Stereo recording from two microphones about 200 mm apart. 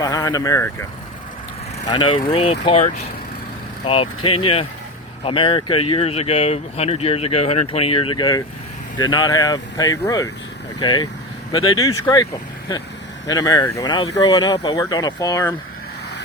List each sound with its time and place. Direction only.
0.0 s speech: 20° left (ahead or behind)
1.9 s speech: 25° left (ahead or behind)